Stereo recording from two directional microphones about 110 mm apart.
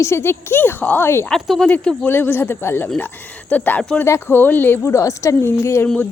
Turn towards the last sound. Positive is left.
turn(degrees=25)  # may be behind; listen again after turning